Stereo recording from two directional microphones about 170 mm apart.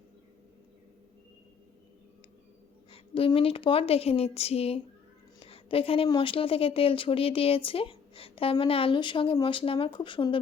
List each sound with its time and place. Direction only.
2.9 s speech: 30° left (ahead or behind)